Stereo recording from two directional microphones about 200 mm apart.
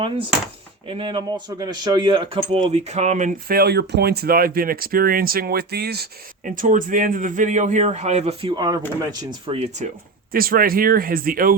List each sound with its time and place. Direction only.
0.9 s speech: 25° right (ahead or behind)
10.3 s speech: 45° right (ahead or behind)